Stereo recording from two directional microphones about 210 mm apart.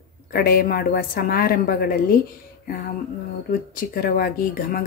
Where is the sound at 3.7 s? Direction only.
45° left (ahead or behind).